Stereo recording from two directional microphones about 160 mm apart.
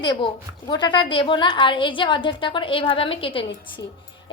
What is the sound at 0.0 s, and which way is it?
A child's voice, 25° left (ahead or behind).